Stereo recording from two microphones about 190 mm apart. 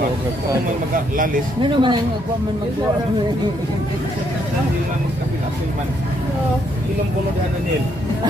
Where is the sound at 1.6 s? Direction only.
25° right (ahead or behind).